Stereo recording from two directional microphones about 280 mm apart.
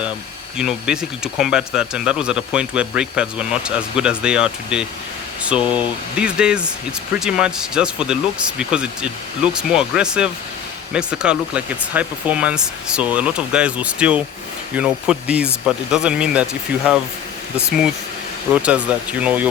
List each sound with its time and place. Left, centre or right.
0.5 s speech: centre
18.6 s speech: centre